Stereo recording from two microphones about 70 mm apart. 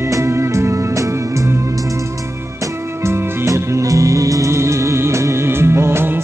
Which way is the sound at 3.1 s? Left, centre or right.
Right.